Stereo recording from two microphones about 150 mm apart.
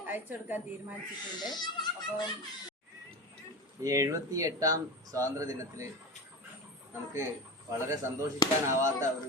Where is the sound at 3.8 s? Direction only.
20° right (ahead or behind).